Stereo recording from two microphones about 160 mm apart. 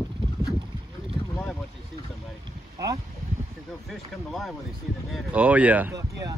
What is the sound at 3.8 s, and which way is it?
Speech, centre (ahead or behind).